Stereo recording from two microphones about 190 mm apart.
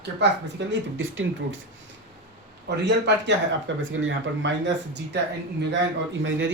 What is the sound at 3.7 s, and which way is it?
Speech, 75° right (ahead or behind).